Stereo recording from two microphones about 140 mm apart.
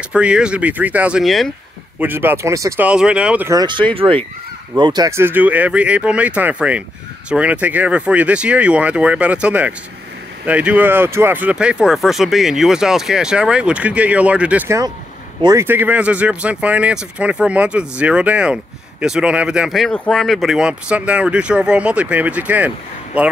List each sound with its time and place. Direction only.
0.1 s speech: 10° right (ahead or behind)
2.0 s speech: 15° right (ahead or behind)
2.8 s speech: 5° right (ahead or behind)
3.6 s speech: 35° right (ahead or behind)
5.1 s speech: 15° right (ahead or behind)